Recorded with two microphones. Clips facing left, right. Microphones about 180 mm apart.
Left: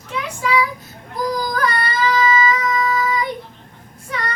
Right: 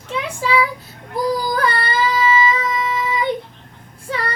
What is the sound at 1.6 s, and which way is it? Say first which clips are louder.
Child singing: right 1 dB; 30° right (ahead or behind).